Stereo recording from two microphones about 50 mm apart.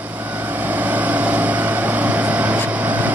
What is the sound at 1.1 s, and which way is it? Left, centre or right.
Vehicle, right.